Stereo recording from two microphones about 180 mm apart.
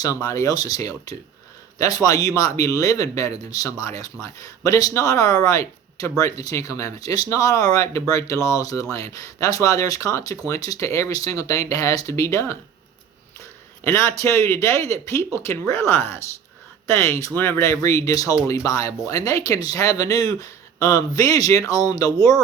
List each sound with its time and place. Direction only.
0.0 s speech: 20° left (ahead or behind)
13.8 s speech: 15° left (ahead or behind)